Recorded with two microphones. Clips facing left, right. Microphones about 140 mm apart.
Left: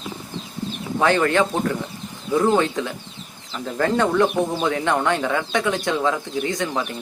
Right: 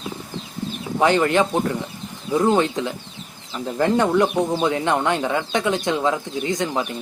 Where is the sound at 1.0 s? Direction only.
20° right (ahead or behind).